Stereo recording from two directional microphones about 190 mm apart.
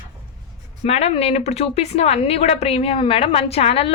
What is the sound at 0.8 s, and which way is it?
A woman's voice, 35° left (ahead or behind).